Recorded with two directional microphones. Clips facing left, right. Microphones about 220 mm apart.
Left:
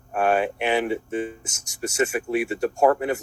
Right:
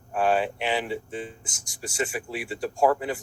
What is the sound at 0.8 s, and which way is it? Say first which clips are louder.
Speech: left 6 dB; 65° left (ahead or behind).